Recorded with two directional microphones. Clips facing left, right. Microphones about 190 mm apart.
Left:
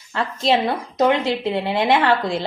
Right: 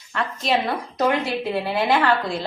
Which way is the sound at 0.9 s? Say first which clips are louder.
Left 4 dB; 20° left (ahead or behind).